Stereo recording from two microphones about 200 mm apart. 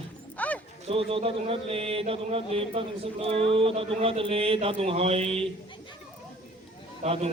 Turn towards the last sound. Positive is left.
turn(degrees=-30)  # may be behind; listen again after turning